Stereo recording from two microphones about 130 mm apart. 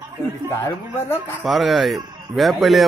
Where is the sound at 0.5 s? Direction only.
20° left (ahead or behind).